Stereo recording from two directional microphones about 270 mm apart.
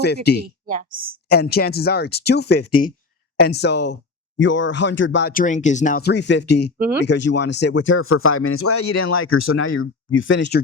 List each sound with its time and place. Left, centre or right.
0.0 s speech: left
0.6 s speech: right
1.3 s speech: left
6.7 s speech: centre
7.0 s speech: left